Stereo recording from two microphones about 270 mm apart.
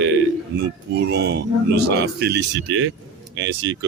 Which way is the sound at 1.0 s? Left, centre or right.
Right.